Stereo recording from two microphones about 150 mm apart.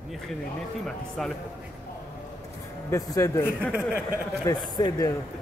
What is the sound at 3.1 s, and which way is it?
Mantra, 20° left (ahead or behind).